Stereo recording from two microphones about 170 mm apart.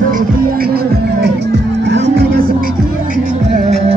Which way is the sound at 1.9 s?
80° right.